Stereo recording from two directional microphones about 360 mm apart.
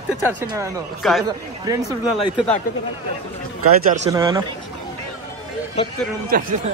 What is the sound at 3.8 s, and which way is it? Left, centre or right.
Speech, centre.